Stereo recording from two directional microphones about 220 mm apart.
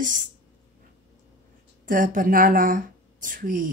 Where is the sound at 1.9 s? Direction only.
35° right (ahead or behind).